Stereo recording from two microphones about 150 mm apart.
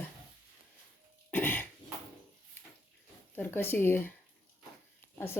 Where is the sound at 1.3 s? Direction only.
15° left (ahead or behind).